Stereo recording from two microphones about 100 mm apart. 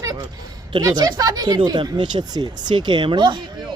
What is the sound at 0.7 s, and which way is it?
Speech, 45° right (ahead or behind).